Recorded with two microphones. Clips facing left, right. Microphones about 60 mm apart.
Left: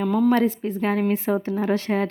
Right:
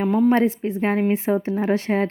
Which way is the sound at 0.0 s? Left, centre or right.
Right.